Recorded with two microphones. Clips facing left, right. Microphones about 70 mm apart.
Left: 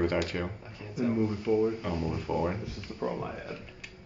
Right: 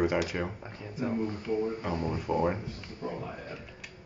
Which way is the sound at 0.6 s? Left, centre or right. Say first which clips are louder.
Left 2 dB; right.